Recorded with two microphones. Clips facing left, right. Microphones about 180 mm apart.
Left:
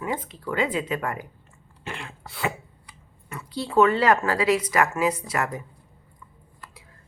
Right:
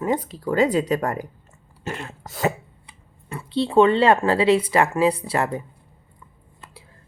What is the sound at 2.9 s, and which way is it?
Speech, 25° right (ahead or behind).